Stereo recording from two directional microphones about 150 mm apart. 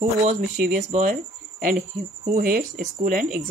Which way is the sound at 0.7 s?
50° right (ahead or behind).